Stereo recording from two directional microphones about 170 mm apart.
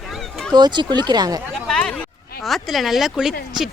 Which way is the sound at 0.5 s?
25° right (ahead or behind).